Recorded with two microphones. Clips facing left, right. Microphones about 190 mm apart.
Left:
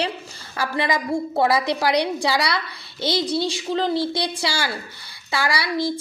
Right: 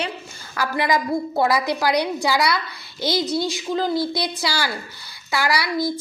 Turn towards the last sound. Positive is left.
turn(degrees=25)  # may be behind; listen again after turning